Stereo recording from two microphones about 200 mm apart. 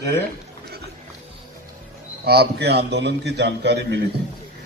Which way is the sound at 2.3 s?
55° right (ahead or behind).